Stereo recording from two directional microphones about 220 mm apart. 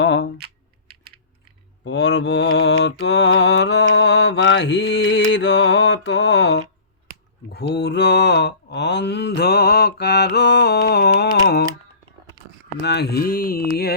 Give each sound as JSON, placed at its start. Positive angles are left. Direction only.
{"t": 0.0, "sound": "typing", "side_deg": 50}
{"t": 0.3, "sound": "typing", "side_deg": -45}
{"t": 1.8, "sound": "mantra", "side_deg": 50}
{"t": 12.8, "sound": "mantra", "side_deg": 50}